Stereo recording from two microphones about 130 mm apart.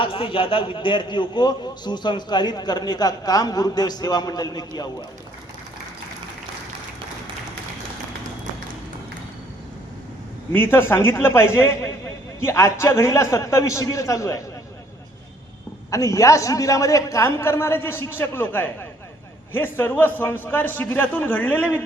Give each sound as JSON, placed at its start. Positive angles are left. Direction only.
{"t": 0.0, "sound": "a man's voice", "side_deg": 45}
{"t": 10.5, "sound": "a man's voice", "side_deg": 15}
{"t": 15.9, "sound": "a man's voice", "side_deg": 25}